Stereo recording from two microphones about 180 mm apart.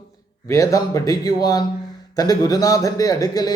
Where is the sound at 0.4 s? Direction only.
20° left (ahead or behind).